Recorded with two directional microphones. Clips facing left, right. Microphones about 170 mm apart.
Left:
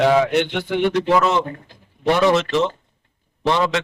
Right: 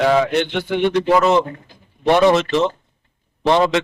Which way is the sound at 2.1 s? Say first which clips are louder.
Right 3 dB; 20° right (ahead or behind).